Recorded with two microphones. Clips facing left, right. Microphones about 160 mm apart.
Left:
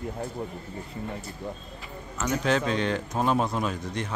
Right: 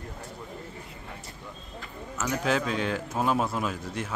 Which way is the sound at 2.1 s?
5° right (ahead or behind).